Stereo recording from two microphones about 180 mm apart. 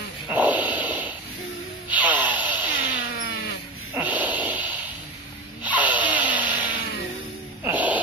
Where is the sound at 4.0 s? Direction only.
10° right (ahead or behind).